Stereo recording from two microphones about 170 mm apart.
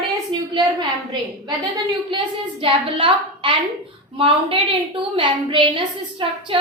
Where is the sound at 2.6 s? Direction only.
30° right (ahead or behind).